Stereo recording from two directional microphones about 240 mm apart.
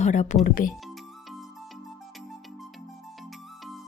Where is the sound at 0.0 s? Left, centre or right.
Left.